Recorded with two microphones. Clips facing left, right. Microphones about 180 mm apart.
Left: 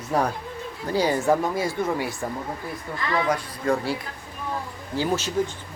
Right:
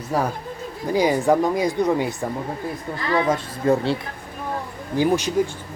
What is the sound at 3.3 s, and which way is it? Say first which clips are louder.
Speech: right 4 dB; 25° right (ahead or behind).